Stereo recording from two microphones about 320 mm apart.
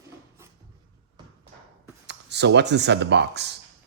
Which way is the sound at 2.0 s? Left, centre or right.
Right.